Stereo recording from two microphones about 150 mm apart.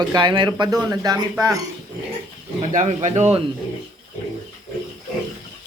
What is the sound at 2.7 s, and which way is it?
Speech, 55° right (ahead or behind).